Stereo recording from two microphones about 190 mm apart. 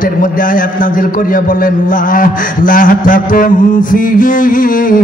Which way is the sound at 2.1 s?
45° left (ahead or behind).